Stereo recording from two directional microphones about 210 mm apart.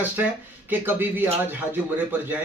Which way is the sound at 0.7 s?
10° right (ahead or behind).